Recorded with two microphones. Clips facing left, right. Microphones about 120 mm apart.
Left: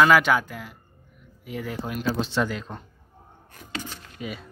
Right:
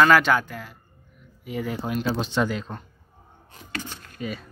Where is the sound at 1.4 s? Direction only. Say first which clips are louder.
Right 3 dB; 5° right (ahead or behind).